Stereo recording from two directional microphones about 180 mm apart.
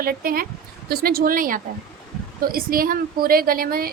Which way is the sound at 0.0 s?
55° right (ahead or behind).